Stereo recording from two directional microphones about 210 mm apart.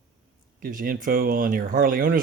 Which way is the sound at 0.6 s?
40° right (ahead or behind).